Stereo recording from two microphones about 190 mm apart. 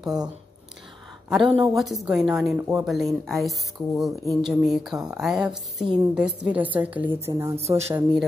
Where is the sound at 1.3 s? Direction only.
Centre (ahead or behind).